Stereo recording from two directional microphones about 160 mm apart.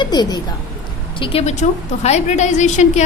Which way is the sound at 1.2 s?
40° left (ahead or behind).